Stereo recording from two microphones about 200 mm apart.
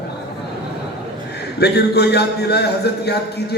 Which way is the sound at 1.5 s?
55° left (ahead or behind).